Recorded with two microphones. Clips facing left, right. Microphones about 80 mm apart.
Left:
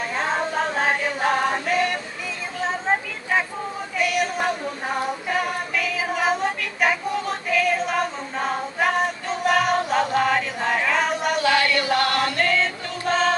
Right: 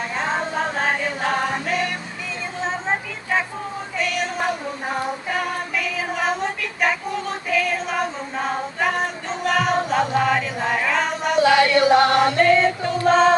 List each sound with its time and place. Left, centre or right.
0.1 s choir: centre
4.0 s female singing: centre
11.3 s chant: right